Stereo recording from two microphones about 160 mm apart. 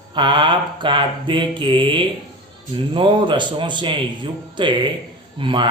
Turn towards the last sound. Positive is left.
turn(degrees=-30)  # may be behind; listen again after turning